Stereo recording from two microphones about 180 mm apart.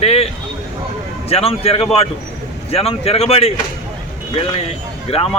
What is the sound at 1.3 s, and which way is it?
Speech, 35° left (ahead or behind).